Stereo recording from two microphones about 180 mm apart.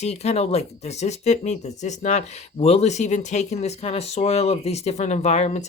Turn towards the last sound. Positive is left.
turn(degrees=40)  # may be behind; listen again after turning